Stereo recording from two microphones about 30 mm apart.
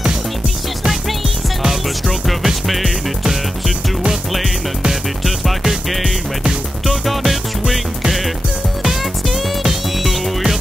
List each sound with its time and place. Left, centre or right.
1.6 s music: centre
6.9 s music: centre